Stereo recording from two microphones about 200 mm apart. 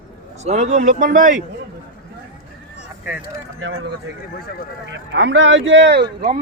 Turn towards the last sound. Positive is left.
turn(degrees=-55)  # may be behind; listen again after turning